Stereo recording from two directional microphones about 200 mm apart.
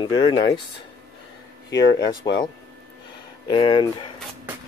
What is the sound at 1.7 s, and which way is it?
Speech, 20° left (ahead or behind).